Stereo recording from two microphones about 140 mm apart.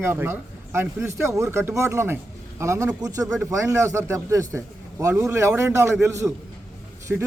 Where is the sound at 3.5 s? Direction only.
20° right (ahead or behind).